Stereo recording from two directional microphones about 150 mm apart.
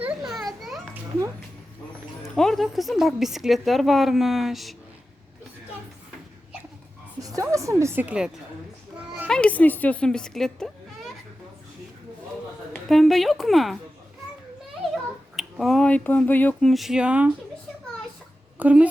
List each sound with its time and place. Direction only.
0.0 s children playing: 5° right (ahead or behind)
2.2 s speech: centre (ahead or behind)
7.2 s a woman's voice: 20° right (ahead or behind)
9.2 s speech: 5° left (ahead or behind)
12.7 s speech: centre (ahead or behind)
15.4 s speech: centre (ahead or behind)
18.6 s a woman's voice: 10° right (ahead or behind)